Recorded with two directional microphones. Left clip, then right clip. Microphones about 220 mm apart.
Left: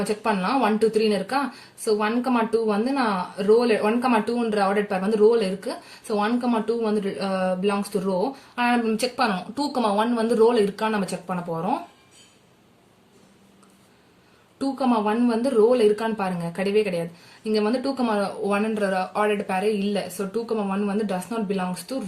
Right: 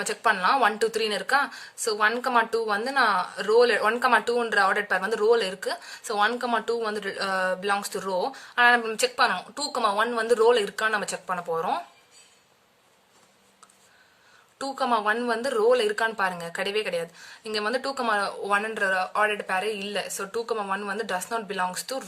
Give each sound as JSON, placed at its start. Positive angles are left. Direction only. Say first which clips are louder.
{"t": 0.0, "sound": "speech", "louder": "right 1 dB", "side_deg": -45}
{"t": 14.6, "sound": "speech", "louder": "left 1 dB", "side_deg": -45}